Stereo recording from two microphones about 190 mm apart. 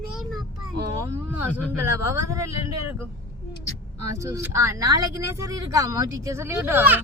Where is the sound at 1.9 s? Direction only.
15° right (ahead or behind).